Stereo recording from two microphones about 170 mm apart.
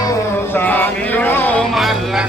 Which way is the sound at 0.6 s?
10° left (ahead or behind).